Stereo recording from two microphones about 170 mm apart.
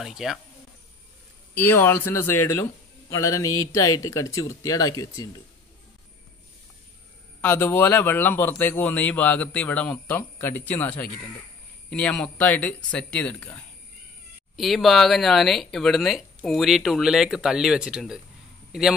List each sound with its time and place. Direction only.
0.0 s speech: centre (ahead or behind)
1.5 s a man's voice: 10° left (ahead or behind)
7.4 s a man's voice: 10° left (ahead or behind)
14.6 s a man's voice: centre (ahead or behind)